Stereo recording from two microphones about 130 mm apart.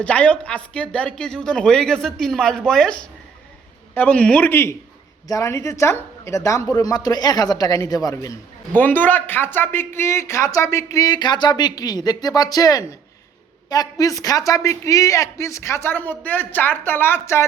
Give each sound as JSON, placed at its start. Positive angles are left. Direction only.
{"t": 0.0, "sound": "a man's voice", "side_deg": 10}
{"t": 8.7, "sound": "speech", "side_deg": 15}
{"t": 14.0, "sound": "speech", "side_deg": 25}